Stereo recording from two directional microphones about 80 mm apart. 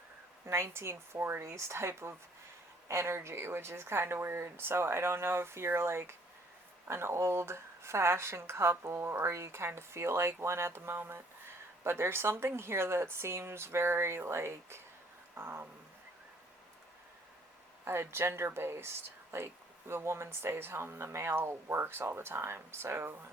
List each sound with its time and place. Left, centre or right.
0.4 s speech: right
15.4 s a sound: right
17.8 s speech: right